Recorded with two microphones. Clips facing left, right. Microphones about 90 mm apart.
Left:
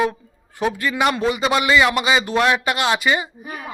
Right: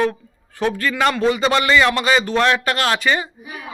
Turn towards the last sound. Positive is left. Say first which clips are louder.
# left 2 dB
turn(degrees=45)  # may be behind; listen again after turning